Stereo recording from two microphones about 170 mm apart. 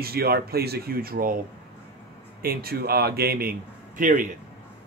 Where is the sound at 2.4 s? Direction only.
60° right (ahead or behind).